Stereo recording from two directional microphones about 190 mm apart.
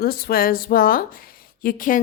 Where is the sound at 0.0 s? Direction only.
55° left (ahead or behind).